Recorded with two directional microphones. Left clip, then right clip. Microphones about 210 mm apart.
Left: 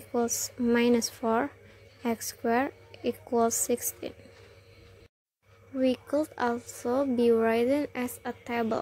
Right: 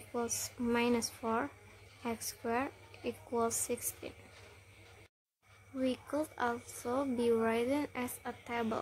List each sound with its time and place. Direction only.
0.1 s a woman's voice: 20° left (ahead or behind)
5.8 s speech: 15° left (ahead or behind)